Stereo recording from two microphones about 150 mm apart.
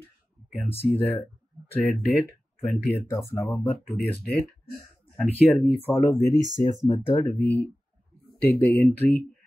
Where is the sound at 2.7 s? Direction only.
15° left (ahead or behind).